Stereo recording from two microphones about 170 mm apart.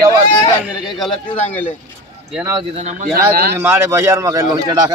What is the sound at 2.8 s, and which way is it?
Speech, 45° right (ahead or behind).